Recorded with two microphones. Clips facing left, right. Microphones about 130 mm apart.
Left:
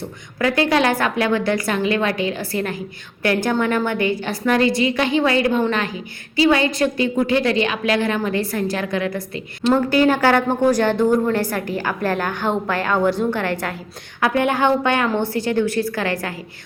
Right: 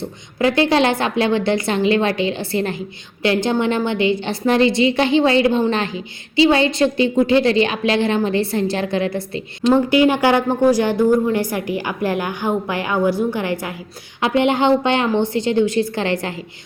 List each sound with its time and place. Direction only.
0.3 s a woman's voice: 25° right (ahead or behind)
9.7 s a woman's voice: 15° right (ahead or behind)
14.2 s a woman's voice: 25° right (ahead or behind)